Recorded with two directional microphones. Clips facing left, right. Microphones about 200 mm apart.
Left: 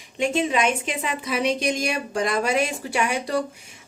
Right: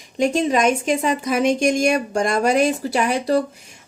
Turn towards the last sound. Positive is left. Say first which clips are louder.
# right 5 dB
turn(degrees=-35)  # may be behind; listen again after turning